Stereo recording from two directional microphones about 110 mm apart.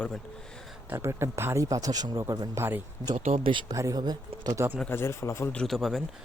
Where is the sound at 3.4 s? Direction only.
50° right (ahead or behind).